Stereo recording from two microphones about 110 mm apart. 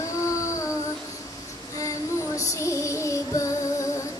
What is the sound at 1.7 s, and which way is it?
Female singing, 30° left (ahead or behind).